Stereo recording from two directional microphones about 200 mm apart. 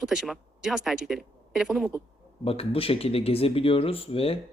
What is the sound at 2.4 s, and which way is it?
Speech, 30° left (ahead or behind).